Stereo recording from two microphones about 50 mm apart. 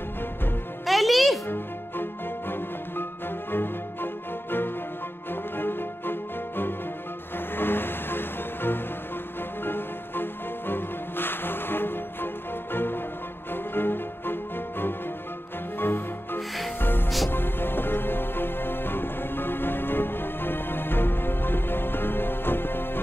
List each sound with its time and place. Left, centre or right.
0.8 s music: centre
1.5 s music: left
16.3 s music: centre
17.3 s music: left